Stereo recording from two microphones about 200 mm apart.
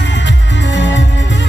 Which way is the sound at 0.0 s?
65° left (ahead or behind).